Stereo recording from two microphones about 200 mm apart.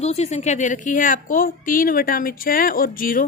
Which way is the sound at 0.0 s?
30° left (ahead or behind).